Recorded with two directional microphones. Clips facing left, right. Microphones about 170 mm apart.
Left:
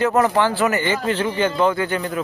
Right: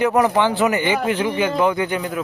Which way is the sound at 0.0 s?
15° right (ahead or behind).